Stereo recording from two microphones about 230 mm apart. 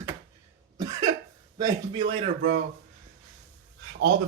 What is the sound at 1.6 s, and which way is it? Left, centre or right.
Speech, right.